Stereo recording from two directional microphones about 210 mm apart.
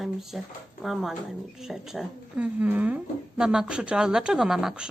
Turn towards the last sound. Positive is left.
turn(degrees=0)  # may be behind; listen again after turning